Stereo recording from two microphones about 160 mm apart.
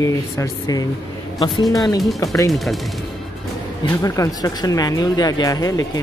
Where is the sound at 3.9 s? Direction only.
20° left (ahead or behind).